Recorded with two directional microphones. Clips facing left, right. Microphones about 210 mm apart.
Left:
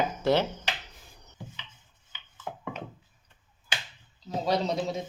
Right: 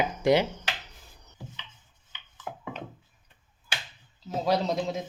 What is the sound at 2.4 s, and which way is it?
Music, centre (ahead or behind).